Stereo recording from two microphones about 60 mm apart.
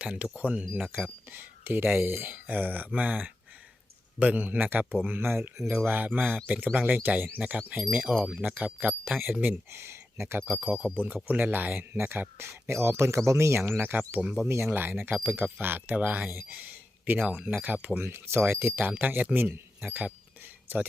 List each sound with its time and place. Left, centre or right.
0.0 s speech: centre
1.3 s speech: right
9.7 s speech: right
10.5 s speech: right
13.7 s speech: right
18.0 s speech: right
18.8 s speech: right